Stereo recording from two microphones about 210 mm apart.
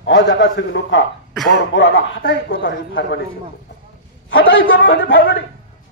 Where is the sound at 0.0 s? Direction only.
60° left (ahead or behind).